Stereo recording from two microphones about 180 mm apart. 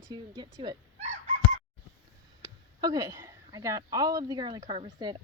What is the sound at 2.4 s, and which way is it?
Speech, 20° right (ahead or behind).